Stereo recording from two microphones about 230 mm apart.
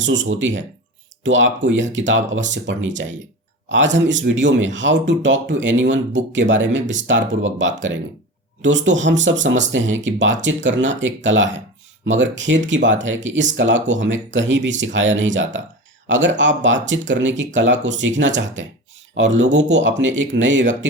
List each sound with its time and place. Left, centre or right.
0.0 s speech: right